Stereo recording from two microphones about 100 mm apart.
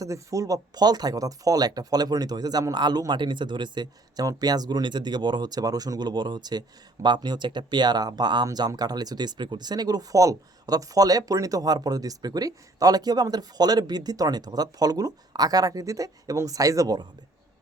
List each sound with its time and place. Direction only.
0.0 s speech: 35° right (ahead or behind)